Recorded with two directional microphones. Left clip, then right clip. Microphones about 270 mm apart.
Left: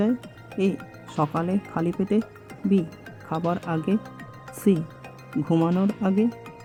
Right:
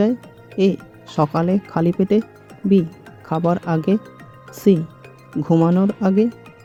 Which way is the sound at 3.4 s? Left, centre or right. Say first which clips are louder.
Right 7 dB; centre.